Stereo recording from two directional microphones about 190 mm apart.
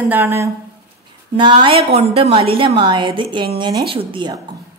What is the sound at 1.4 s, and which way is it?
A woman's voice, 25° right (ahead or behind).